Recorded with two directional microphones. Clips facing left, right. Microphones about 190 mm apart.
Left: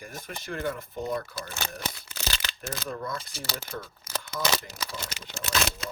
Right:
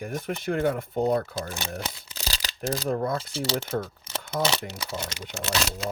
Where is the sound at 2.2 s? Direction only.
35° right (ahead or behind).